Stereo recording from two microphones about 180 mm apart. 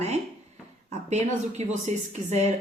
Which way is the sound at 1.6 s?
40° right (ahead or behind).